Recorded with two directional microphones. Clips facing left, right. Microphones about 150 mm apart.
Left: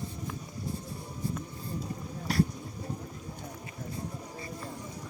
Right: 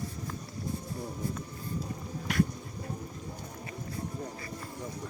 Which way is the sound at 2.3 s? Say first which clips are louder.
Left 1 dB; 35° left (ahead or behind).